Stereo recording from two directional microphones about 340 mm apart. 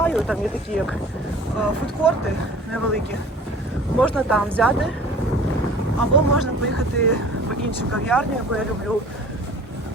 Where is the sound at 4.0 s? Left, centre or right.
Centre.